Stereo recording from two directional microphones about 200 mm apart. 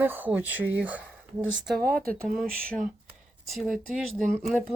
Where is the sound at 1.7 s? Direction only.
50° right (ahead or behind).